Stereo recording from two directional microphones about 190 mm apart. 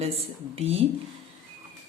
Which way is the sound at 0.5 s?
30° right (ahead or behind).